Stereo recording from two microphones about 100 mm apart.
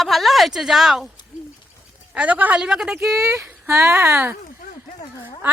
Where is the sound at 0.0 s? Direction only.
Centre (ahead or behind).